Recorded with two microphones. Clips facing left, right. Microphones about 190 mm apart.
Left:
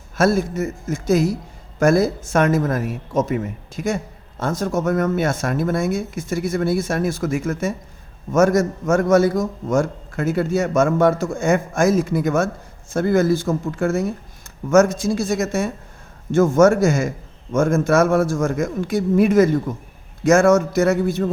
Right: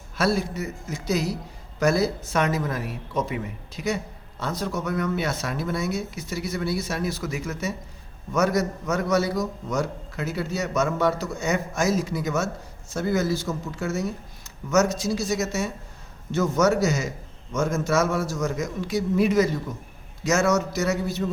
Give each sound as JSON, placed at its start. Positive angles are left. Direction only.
{"t": 0.2, "sound": "a man's voice", "side_deg": 45}